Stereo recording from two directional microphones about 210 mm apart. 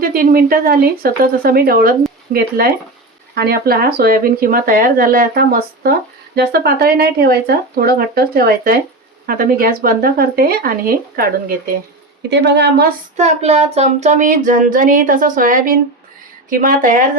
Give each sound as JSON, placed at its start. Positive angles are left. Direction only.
{"t": 0.0, "sound": "speech", "side_deg": -45}
{"t": 13.1, "sound": "child singing", "side_deg": -30}
{"t": 13.7, "sound": "a woman's voice", "side_deg": -30}